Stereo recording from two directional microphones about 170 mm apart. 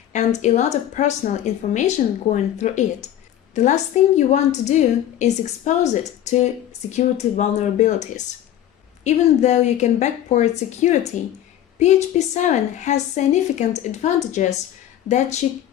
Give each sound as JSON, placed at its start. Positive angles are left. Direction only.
{"t": 0.1, "sound": "a woman's voice", "side_deg": 40}